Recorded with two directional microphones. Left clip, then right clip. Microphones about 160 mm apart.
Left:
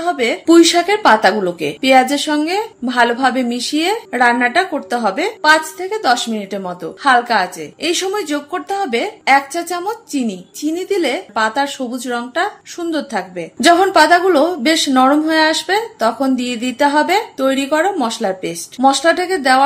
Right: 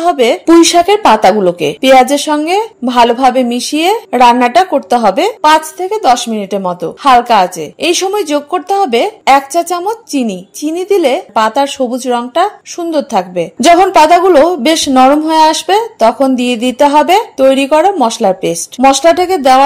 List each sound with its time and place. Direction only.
0.0 s speech: 45° right (ahead or behind)